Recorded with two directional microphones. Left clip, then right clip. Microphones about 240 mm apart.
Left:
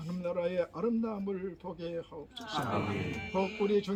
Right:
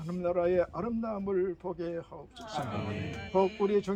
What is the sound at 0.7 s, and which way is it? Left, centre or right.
Speech, centre.